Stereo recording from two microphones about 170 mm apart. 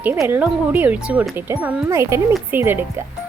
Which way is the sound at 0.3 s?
10° right (ahead or behind).